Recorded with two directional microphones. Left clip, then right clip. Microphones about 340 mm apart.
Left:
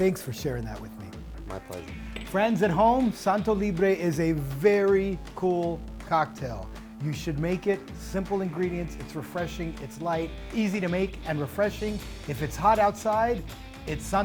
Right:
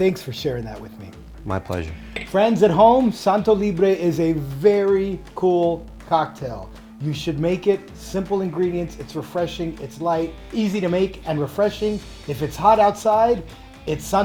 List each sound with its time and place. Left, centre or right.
0.0 s speech: left
1.5 s speech: right
2.1 s speech: left
5.4 s speech: left